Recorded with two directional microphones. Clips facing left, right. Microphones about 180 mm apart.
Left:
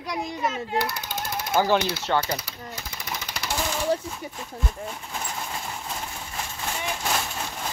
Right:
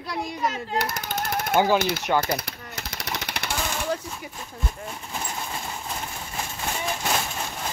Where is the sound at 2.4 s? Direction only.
75° right (ahead or behind).